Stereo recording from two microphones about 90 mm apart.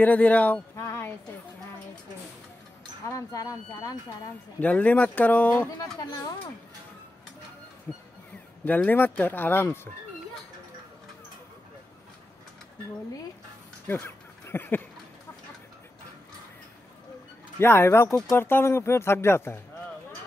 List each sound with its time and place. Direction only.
0.0 s speech: 15° left (ahead or behind)
0.7 s a sound: 30° left (ahead or behind)
3.1 s speech: 40° left (ahead or behind)
4.6 s speech: 15° left (ahead or behind)
5.8 s speech: 50° left (ahead or behind)
7.9 s speech: 25° left (ahead or behind)
14.0 s a sound: 25° left (ahead or behind)
17.6 s speech: 25° left (ahead or behind)